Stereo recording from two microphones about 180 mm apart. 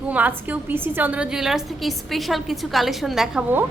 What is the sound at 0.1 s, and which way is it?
A woman's voice, 10° right (ahead or behind).